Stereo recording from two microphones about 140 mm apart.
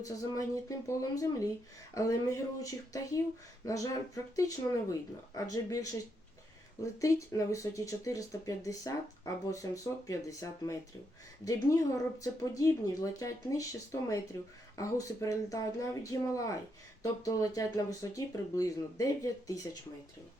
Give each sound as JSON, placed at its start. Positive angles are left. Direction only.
{"t": 0.0, "sound": "speech", "side_deg": 25}
{"t": 7.0, "sound": "speech", "side_deg": 25}